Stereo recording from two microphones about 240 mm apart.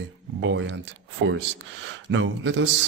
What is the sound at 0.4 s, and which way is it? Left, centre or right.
A man's voice, right.